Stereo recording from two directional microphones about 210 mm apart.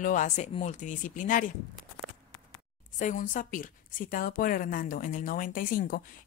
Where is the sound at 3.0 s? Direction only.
40° left (ahead or behind).